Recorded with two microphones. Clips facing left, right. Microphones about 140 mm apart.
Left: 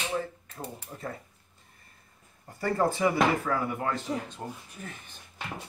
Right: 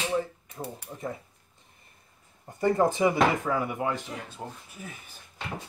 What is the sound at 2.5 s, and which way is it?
Speech, 20° right (ahead or behind).